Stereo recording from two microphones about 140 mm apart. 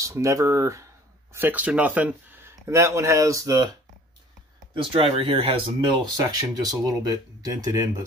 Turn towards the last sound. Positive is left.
turn(degrees=-25)  # may be behind; listen again after turning